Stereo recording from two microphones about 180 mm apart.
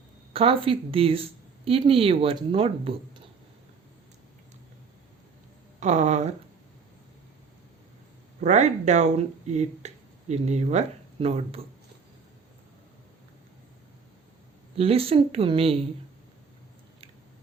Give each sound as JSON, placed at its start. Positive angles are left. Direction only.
{"t": 0.3, "sound": "speech", "side_deg": -30}
{"t": 5.8, "sound": "speech", "side_deg": -40}
{"t": 8.4, "sound": "speech", "side_deg": -40}
{"t": 14.8, "sound": "speech", "side_deg": -35}